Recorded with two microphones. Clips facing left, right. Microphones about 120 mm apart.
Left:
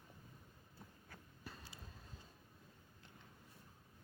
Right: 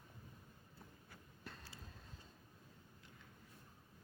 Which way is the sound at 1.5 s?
15° left (ahead or behind).